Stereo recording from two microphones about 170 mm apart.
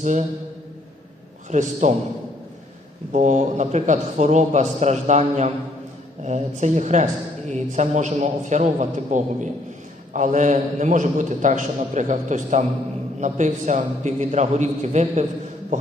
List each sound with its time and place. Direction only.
0.0 s speech: 45° right (ahead or behind)
1.5 s speech: 45° right (ahead or behind)
3.1 s speech: 45° right (ahead or behind)